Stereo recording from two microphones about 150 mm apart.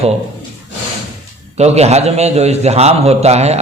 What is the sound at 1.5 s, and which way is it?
A man's voice, 45° right (ahead or behind).